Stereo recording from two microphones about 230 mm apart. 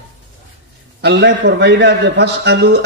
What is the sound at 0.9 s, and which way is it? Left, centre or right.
A man's voice, right.